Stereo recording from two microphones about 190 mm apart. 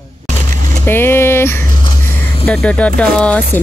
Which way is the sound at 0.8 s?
10° left (ahead or behind).